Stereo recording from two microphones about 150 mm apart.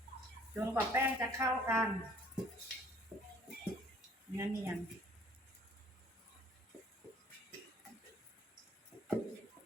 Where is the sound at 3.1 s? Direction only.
5° right (ahead or behind).